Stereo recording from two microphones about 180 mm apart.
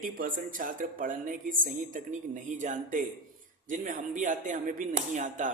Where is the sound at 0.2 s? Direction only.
50° right (ahead or behind).